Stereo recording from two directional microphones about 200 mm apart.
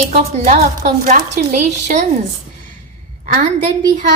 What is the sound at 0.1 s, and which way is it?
A woman's voice, 35° right (ahead or behind).